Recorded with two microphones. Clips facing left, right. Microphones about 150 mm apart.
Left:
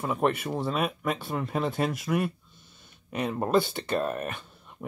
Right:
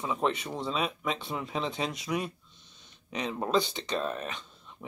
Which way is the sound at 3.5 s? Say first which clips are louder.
Left 4 dB; 55° left (ahead or behind).